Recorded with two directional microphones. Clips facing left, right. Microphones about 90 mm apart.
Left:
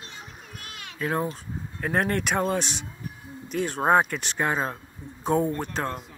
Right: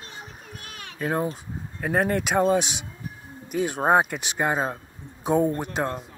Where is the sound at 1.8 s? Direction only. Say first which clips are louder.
Right 2 dB; 5° right (ahead or behind).